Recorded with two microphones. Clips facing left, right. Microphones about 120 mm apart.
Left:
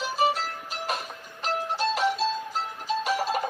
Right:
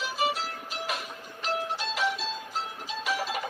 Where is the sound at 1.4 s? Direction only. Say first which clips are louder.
Left 4 dB; 45° left (ahead or behind).